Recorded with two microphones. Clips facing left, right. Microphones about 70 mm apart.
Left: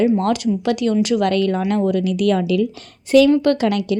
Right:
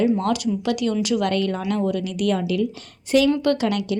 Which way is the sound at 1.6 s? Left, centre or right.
Left.